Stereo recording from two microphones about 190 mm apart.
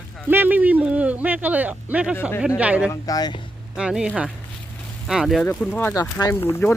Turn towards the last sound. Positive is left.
turn(degrees=15)  # may be behind; listen again after turning